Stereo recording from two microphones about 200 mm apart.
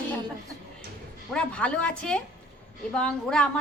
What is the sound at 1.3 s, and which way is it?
A woman's voice, 5° left (ahead or behind).